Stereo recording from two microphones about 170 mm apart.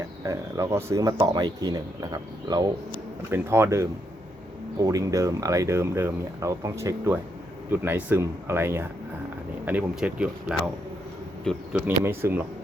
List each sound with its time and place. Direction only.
0.3 s speech: 20° right (ahead or behind)
11.7 s speech: 15° right (ahead or behind)